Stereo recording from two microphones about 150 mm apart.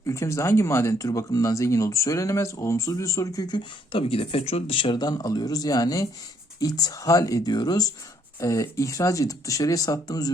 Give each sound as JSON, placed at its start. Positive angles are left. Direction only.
{"t": 0.1, "sound": "speech", "side_deg": 20}